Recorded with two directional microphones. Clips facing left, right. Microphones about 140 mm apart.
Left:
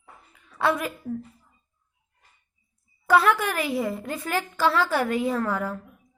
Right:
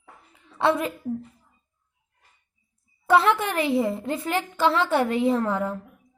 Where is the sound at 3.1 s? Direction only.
25° right (ahead or behind).